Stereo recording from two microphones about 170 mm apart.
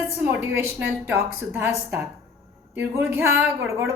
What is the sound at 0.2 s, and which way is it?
Speech, 15° right (ahead or behind).